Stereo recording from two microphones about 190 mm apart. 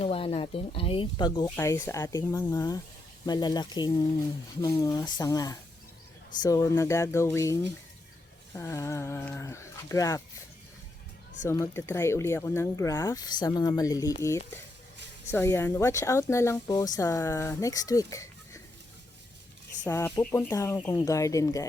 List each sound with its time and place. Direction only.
0.0 s speech: 30° left (ahead or behind)
11.4 s speech: 15° left (ahead or behind)
19.8 s speech: 15° left (ahead or behind)